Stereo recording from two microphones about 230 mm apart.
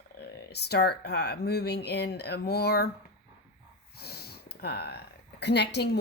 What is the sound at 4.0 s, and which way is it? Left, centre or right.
Speech, left.